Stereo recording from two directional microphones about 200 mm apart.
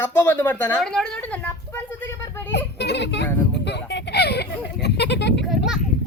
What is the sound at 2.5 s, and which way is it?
Speech, 60° left (ahead or behind).